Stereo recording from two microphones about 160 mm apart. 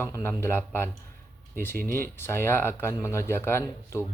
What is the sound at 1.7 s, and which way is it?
Speech, 65° right (ahead or behind).